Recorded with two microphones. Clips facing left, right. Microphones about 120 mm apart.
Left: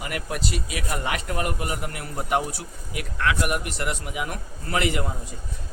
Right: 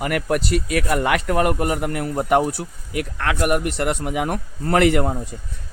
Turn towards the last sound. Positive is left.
turn(degrees=-50)  # may be behind; listen again after turning